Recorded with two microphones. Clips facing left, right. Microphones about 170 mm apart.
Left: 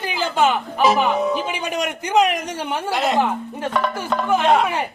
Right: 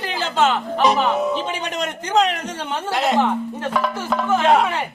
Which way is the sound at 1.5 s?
10° left (ahead or behind).